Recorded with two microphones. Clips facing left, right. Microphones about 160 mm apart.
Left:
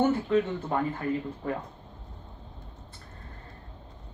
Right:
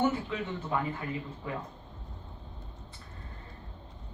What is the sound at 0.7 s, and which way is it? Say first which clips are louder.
Speech: left 5 dB; 50° left (ahead or behind).